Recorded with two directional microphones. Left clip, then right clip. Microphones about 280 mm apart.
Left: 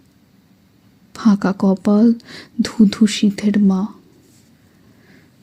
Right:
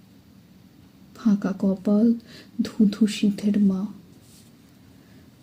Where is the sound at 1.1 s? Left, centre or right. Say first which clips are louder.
Left 8 dB; left.